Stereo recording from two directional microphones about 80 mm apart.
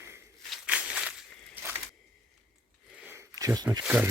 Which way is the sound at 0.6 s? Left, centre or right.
Centre.